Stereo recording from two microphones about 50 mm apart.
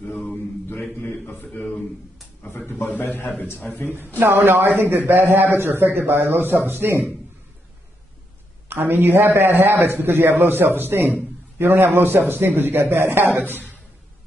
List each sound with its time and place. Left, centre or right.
0.0 s mantra: centre
1.2 s mantra: left
3.0 s a man's voice: left
4.2 s a man's voice: right
8.6 s a man's voice: right